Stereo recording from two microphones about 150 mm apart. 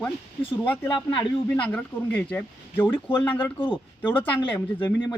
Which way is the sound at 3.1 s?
30° left (ahead or behind).